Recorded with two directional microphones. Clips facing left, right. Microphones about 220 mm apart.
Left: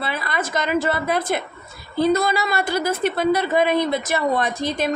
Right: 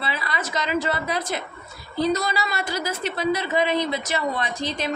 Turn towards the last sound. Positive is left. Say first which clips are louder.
# left 5 dB
turn(degrees=55)  # may be behind; listen again after turning